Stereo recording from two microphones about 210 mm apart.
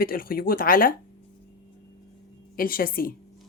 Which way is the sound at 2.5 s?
45° left (ahead or behind).